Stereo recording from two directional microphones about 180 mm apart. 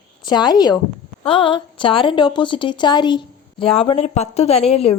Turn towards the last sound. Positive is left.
turn(degrees=35)  # may be behind; listen again after turning